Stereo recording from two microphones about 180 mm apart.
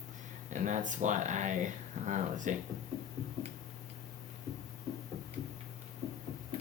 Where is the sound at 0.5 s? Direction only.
45° right (ahead or behind).